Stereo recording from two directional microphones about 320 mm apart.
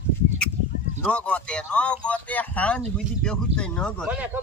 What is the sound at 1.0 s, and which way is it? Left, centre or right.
Speech, centre.